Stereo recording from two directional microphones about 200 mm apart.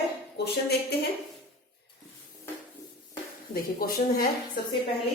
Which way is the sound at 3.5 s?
50° left (ahead or behind).